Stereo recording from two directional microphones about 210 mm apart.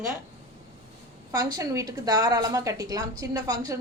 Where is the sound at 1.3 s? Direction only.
20° right (ahead or behind).